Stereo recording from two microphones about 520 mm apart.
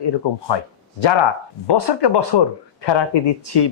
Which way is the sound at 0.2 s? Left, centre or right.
Left.